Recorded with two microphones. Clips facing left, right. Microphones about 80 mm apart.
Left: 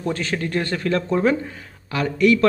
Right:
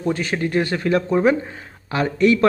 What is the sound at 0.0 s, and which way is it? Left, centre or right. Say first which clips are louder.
Speech: right 3 dB; centre.